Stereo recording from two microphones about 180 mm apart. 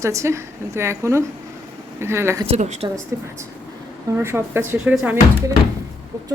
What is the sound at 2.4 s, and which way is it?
Speech, 40° right (ahead or behind).